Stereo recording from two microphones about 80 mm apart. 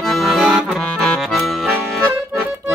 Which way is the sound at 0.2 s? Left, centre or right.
Centre.